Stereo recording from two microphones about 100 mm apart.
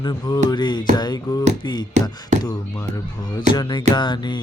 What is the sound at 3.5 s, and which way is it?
Speech, 50° left (ahead or behind).